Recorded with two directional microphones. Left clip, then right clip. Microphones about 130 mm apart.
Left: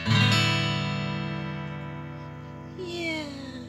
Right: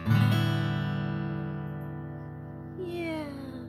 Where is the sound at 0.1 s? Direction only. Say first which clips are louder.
Left 7 dB; 40° left (ahead or behind).